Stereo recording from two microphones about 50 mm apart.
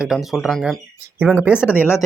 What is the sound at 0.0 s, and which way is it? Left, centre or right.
Speech, centre.